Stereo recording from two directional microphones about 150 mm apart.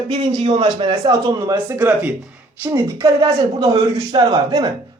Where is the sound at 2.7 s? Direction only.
25° right (ahead or behind).